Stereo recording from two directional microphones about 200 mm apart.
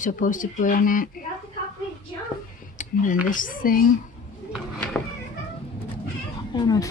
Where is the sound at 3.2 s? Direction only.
45° left (ahead or behind).